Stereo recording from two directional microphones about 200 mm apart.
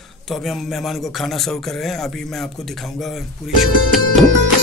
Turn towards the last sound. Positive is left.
turn(degrees=0)  # may be behind; listen again after turning